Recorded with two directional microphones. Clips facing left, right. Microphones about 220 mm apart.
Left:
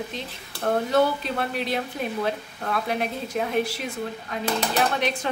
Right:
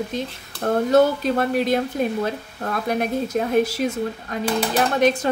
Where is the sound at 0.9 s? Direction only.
45° right (ahead or behind).